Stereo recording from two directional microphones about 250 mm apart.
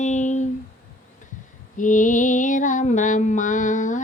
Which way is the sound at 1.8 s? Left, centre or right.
Left.